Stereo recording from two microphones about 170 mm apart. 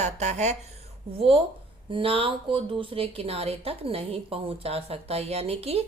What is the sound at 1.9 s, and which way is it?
Speech, 30° right (ahead or behind).